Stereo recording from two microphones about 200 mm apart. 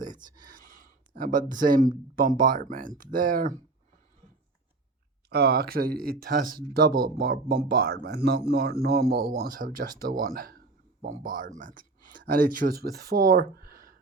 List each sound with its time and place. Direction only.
0.0 s a sound: 40° right (ahead or behind)
0.3 s speech: 45° right (ahead or behind)
5.3 s speech: 50° right (ahead or behind)